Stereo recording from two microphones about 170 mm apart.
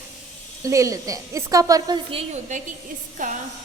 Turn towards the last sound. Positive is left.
turn(degrees=-50)  # may be behind; listen again after turning